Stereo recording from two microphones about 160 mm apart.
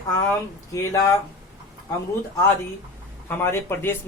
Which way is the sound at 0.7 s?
20° left (ahead or behind).